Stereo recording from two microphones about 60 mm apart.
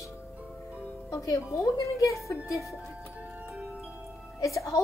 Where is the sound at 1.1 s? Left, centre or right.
Left.